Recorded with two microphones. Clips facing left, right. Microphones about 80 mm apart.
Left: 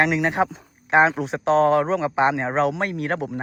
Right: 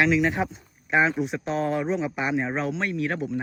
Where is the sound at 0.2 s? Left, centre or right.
Left.